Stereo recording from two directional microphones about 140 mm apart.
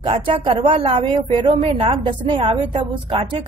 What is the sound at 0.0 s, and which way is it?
A woman's voice, 40° right (ahead or behind).